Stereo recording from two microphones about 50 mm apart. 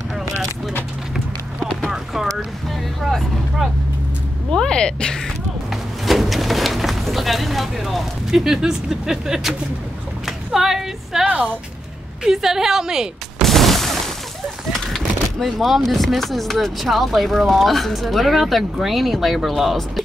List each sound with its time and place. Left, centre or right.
3.1 s vehicle: centre
4.5 s a woman's voice: centre
5.7 s a sound: centre
11.2 s speech: right
12.2 s a woman's voice: centre
13.4 s fusillade: centre
14.9 s speech: centre